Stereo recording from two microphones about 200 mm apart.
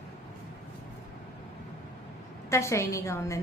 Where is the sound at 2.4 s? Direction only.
15° left (ahead or behind).